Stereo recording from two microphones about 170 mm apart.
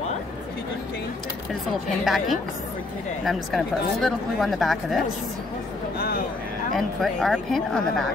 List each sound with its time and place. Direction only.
2.0 s speech: centre (ahead or behind)
5.9 s a sound: 65° left (ahead or behind)
6.7 s speech: centre (ahead or behind)